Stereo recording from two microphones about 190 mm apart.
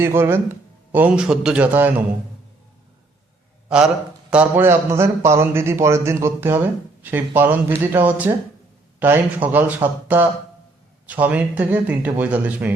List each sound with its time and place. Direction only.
0.0 s a man's voice: 10° right (ahead or behind)
3.7 s a man's voice: 5° right (ahead or behind)